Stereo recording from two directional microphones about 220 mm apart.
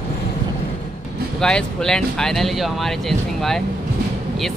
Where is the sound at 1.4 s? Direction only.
5° left (ahead or behind).